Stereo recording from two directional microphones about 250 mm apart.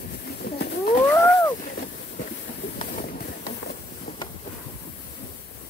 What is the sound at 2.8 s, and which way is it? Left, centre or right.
Train, left.